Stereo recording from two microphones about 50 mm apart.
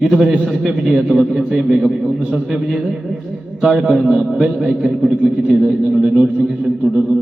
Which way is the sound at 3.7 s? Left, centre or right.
Centre.